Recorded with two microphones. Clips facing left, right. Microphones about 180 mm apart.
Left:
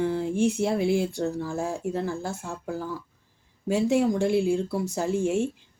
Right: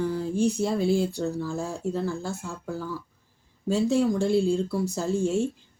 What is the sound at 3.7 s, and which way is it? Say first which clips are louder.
Speech: even; 15° left (ahead or behind).